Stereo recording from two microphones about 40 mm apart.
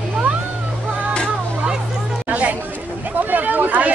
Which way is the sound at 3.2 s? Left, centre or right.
Right.